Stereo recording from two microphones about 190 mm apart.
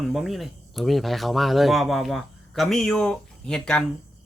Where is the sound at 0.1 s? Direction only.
Centre (ahead or behind).